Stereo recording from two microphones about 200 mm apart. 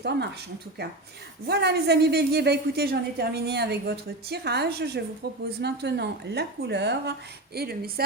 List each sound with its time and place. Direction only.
0.0 s a woman's voice: 60° right (ahead or behind)
1.5 s a woman's voice: 55° right (ahead or behind)